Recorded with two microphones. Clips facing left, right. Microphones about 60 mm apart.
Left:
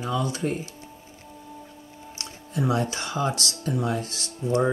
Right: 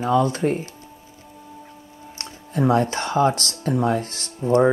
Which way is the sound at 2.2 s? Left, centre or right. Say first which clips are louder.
Right 6 dB; right.